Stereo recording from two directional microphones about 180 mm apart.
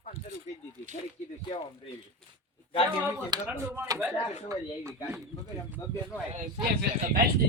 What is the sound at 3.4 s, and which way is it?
Speech, 15° right (ahead or behind).